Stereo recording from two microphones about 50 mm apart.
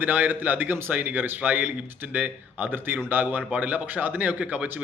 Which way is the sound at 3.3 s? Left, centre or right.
Right.